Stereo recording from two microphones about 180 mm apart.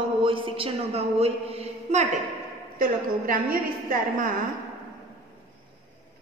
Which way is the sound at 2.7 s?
50° right (ahead or behind).